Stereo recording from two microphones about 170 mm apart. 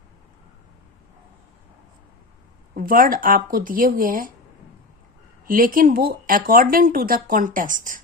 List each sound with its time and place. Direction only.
2.7 s speech: 55° right (ahead or behind)
5.5 s speech: 55° right (ahead or behind)